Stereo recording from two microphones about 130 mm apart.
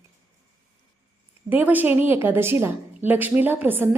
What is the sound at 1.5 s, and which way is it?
A woman's voice, 15° right (ahead or behind).